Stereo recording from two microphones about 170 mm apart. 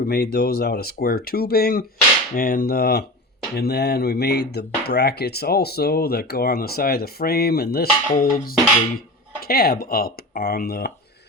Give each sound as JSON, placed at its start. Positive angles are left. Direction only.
{"t": 0.0, "sound": "speech", "side_deg": 65}